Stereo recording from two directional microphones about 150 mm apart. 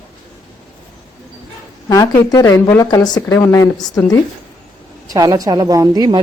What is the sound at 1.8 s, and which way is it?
Speech, 25° left (ahead or behind).